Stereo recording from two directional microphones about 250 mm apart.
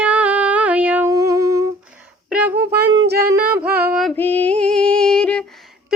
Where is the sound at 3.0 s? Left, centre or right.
Right.